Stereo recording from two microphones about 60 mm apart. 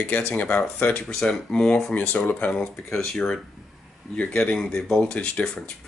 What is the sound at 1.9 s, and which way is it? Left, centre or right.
Speech, left.